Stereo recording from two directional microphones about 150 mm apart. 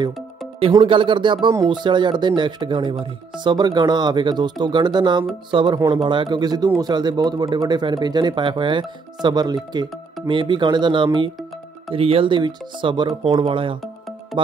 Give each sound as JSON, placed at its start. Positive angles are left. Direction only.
{"t": 0.7, "sound": "speech", "side_deg": -35}
{"t": 14.3, "sound": "music", "side_deg": 0}